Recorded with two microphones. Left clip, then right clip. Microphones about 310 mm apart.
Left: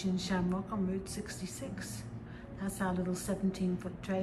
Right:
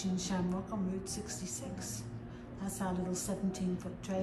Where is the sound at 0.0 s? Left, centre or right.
Centre.